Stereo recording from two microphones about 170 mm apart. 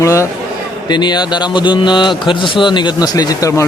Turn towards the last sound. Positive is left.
turn(degrees=20)  # may be behind; listen again after turning